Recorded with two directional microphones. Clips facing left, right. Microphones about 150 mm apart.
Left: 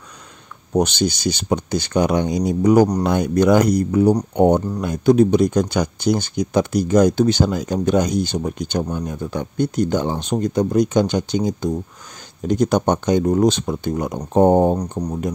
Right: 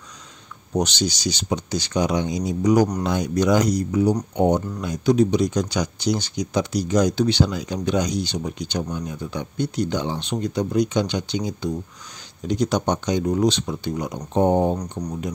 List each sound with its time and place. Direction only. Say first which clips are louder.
0.7 s speech: left 5 dB; 55° left (ahead or behind)
14.8 s speech: left 5 dB; 30° left (ahead or behind)